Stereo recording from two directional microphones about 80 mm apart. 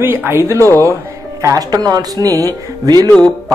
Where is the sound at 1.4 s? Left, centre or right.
Right.